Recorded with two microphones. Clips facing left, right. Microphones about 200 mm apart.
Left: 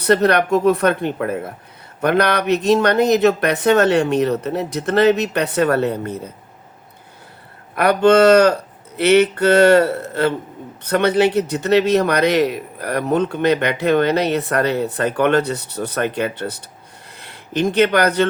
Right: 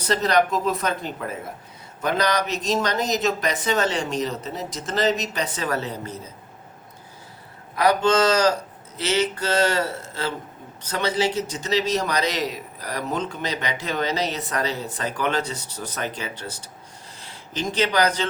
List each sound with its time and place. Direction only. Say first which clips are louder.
0.0 s a man's voice: left 6 dB; 60° left (ahead or behind)
7.8 s a man's voice: left 7 dB; 60° left (ahead or behind)